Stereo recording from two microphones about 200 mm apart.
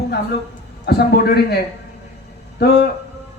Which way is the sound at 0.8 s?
55° left (ahead or behind).